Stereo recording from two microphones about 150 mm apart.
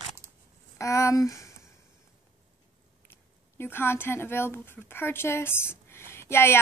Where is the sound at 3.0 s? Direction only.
15° left (ahead or behind).